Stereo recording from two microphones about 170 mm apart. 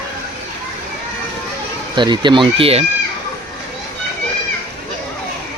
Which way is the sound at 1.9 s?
25° right (ahead or behind).